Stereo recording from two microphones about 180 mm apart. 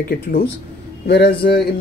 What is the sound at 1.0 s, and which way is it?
Speech, 65° left (ahead or behind).